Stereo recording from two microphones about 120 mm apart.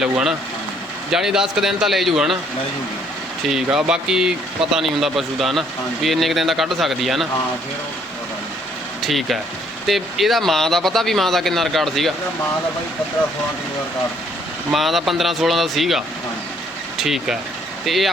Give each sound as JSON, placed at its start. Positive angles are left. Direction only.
{"t": 0.0, "sound": "a man's voice", "side_deg": -5}
{"t": 3.5, "sound": "a man's voice", "side_deg": -5}
{"t": 9.0, "sound": "a man's voice", "side_deg": 0}
{"t": 14.7, "sound": "a man's voice", "side_deg": 0}